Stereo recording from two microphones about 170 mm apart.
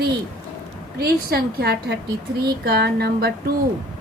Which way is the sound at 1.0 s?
65° right (ahead or behind).